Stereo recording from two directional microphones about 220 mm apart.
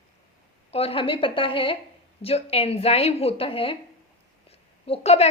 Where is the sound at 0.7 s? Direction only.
25° left (ahead or behind).